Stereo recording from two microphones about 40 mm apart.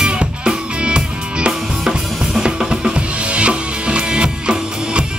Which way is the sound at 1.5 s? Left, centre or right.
Centre.